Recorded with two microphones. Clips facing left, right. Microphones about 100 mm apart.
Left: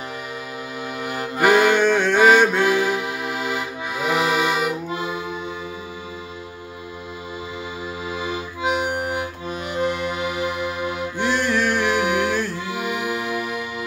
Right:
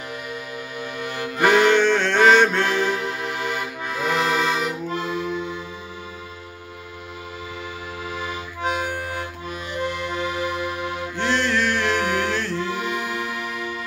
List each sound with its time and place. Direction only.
1.0 s accordion: 25° left (ahead or behind)
1.4 s music: 5° left (ahead or behind)
8.1 s accordion: 20° left (ahead or behind)
10.2 s music: 15° left (ahead or behind)